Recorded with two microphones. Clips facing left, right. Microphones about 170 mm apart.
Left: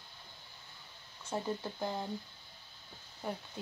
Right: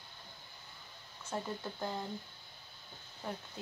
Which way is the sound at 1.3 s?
15° left (ahead or behind).